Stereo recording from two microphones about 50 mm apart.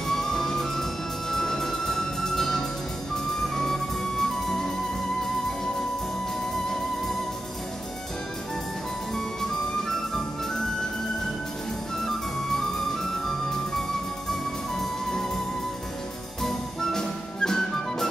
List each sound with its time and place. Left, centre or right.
0.1 s music: centre
9.1 s music: centre
12.4 s music: centre
16.4 s music: centre